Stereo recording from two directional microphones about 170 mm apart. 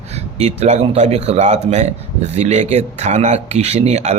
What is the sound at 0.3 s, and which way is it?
Speech, 40° right (ahead or behind).